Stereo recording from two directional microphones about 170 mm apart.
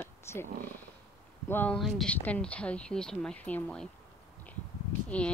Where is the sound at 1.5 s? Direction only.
10° left (ahead or behind).